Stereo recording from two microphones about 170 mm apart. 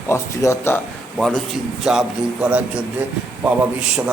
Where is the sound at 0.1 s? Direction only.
15° left (ahead or behind).